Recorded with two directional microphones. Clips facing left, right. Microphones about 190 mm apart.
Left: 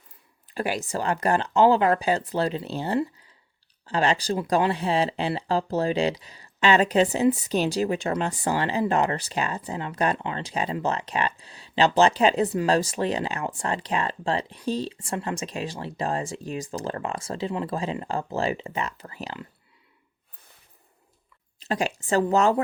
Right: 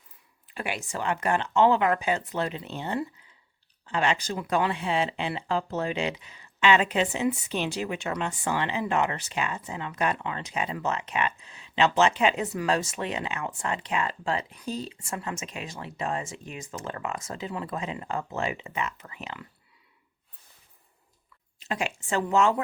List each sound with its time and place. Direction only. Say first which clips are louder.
0.4 s speech: left 6 dB; 35° left (ahead or behind)
21.6 s speech: left 4 dB; 35° left (ahead or behind)